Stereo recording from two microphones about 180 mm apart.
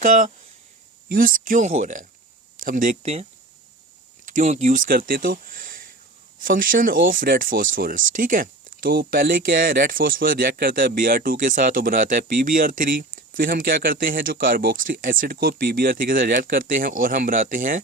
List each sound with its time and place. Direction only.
0.0 s speech: 45° right (ahead or behind)
4.3 s speech: 45° right (ahead or behind)